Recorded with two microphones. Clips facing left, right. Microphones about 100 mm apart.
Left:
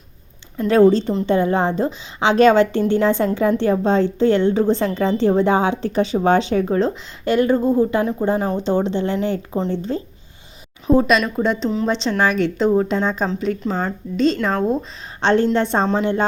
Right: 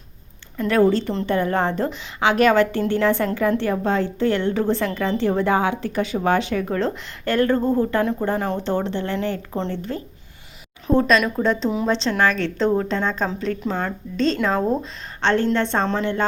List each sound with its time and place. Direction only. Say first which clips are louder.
0.7 s a woman's voice: left 4 dB; 20° left (ahead or behind)
10.8 s a woman's voice: left 2 dB; 10° left (ahead or behind)
15.2 s a woman's voice: left 3 dB; 20° left (ahead or behind)